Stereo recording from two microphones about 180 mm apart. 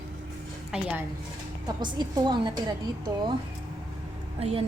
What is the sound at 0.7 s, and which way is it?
Speech, 5° right (ahead or behind).